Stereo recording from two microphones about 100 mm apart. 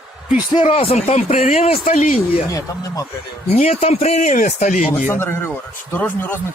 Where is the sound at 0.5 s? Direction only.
65° left (ahead or behind); by 1.9 s 80° left.